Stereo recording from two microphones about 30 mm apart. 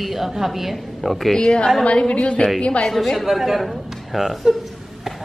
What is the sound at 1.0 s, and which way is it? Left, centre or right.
Speech, centre.